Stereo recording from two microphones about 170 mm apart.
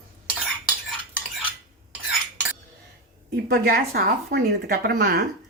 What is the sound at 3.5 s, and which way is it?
Speech, 65° right (ahead or behind).